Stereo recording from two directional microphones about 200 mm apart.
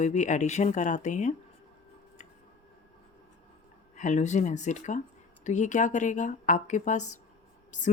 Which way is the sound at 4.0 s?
35° left (ahead or behind).